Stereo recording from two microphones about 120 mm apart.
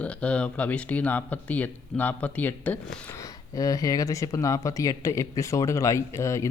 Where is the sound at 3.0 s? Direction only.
25° left (ahead or behind).